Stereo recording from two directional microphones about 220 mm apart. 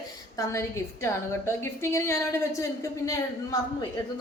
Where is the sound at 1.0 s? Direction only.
10° left (ahead or behind).